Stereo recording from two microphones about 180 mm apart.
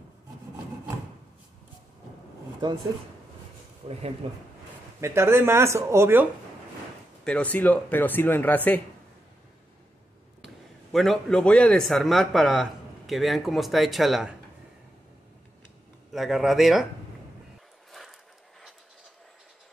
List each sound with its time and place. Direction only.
2.6 s speech: 25° right (ahead or behind)
3.8 s speech: 35° right (ahead or behind)
5.0 s speech: 15° right (ahead or behind)
7.2 s speech: 10° left (ahead or behind)
10.4 s a man's voice: centre (ahead or behind)
16.1 s a man's voice: centre (ahead or behind)